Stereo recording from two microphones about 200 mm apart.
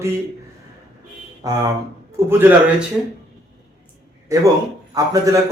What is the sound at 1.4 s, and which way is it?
Speech, 20° right (ahead or behind).